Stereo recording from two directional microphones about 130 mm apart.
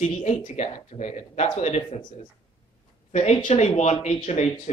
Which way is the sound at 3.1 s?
55° left (ahead or behind).